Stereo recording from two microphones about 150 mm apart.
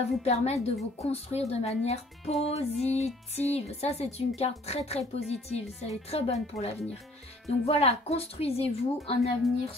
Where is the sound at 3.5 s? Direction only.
45° left (ahead or behind).